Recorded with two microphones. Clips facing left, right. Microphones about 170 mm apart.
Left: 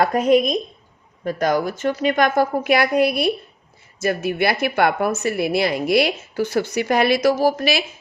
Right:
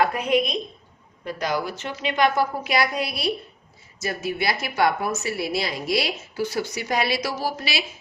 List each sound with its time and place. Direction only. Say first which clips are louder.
0.0 s speech: left 5 dB; 40° left (ahead or behind)